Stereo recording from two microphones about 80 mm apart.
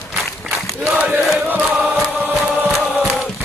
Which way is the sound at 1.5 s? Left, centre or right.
Centre.